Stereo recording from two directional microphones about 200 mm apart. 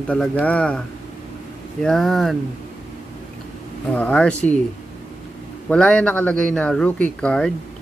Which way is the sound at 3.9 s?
5° left (ahead or behind).